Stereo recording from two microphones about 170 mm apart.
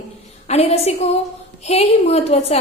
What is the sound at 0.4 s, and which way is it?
A woman's voice, 40° left (ahead or behind).